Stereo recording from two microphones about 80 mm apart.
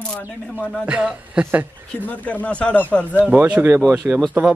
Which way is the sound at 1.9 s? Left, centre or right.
Centre.